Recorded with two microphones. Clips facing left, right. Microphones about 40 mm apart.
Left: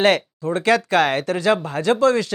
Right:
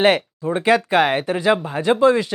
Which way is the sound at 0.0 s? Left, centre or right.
Centre.